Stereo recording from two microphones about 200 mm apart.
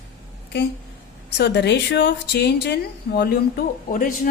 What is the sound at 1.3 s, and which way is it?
A woman's voice, 60° left (ahead or behind).